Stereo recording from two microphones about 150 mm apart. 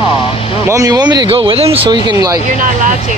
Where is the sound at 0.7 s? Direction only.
25° right (ahead or behind).